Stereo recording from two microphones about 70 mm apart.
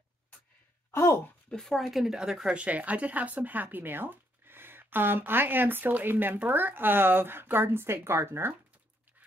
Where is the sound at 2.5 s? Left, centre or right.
Right.